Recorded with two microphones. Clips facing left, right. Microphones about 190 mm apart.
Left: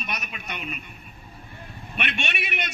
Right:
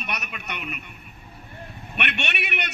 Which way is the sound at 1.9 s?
65° right (ahead or behind).